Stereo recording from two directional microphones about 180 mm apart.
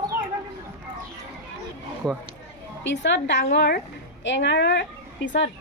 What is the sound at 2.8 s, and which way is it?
Speech, 90° left.